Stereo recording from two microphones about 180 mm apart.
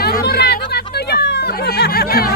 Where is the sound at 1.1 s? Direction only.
65° left (ahead or behind).